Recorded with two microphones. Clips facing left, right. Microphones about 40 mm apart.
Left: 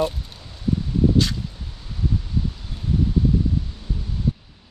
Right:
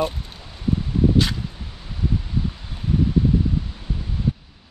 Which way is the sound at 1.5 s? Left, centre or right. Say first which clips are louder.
Right 1 dB; right.